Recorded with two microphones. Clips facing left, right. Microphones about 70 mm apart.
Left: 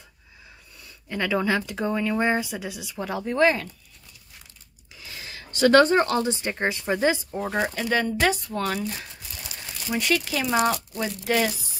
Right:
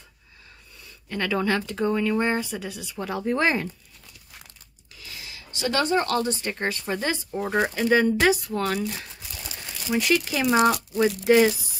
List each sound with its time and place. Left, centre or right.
0.8 s speech: centre
3.3 s speech: centre
5.3 s speech: left
6.0 s speech: left
7.2 s speech: centre
9.8 s speech: centre